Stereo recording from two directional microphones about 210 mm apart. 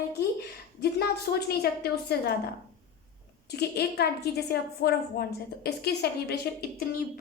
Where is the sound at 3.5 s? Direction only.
50° left (ahead or behind).